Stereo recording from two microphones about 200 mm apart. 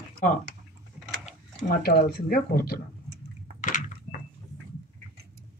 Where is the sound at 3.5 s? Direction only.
40° left (ahead or behind).